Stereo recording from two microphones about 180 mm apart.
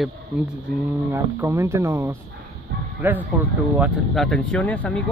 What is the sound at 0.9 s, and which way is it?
Speech, 15° right (ahead or behind).